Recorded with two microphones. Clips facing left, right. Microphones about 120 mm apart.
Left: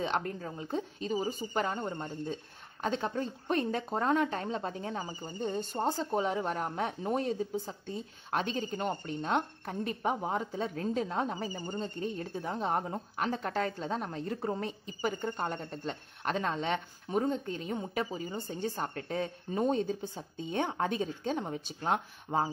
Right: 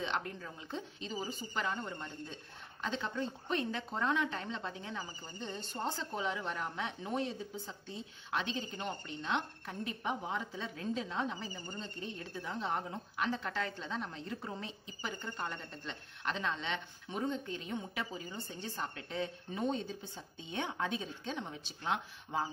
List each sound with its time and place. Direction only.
0.0 s speech: 45° left (ahead or behind)